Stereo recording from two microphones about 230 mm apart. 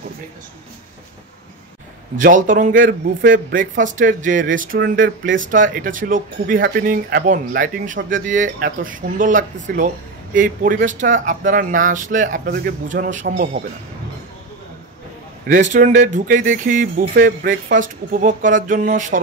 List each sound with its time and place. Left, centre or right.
2.1 s speech: right
15.7 s speech: right